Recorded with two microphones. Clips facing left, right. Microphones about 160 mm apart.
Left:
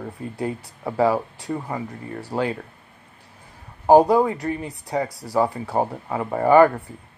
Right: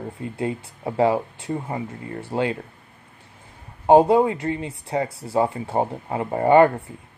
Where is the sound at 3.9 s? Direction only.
25° right (ahead or behind).